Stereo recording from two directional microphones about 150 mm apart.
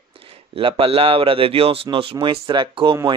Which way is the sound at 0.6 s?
35° right (ahead or behind).